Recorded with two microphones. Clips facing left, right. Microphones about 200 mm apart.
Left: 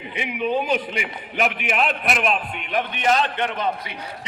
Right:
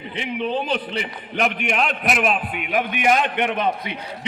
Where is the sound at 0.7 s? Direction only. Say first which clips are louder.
Left 1 dB; 10° left (ahead or behind).